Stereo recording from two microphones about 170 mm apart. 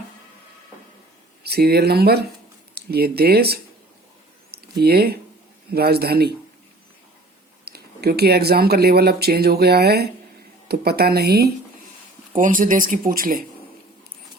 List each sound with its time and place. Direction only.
1.5 s speech: 70° right (ahead or behind)
7.6 s speech: 70° right (ahead or behind)
12.3 s speech: 50° right (ahead or behind)